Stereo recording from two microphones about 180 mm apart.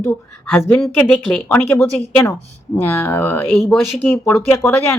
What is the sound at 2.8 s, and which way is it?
Speech, 10° left (ahead or behind).